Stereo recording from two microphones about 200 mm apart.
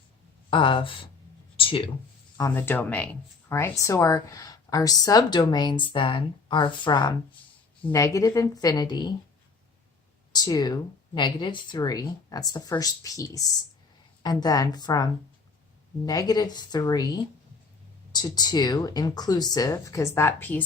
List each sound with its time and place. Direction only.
0.5 s speech: 25° left (ahead or behind)
1.5 s a sound: 25° left (ahead or behind)
2.4 s speech: 10° left (ahead or behind)
10.3 s speech: 20° left (ahead or behind)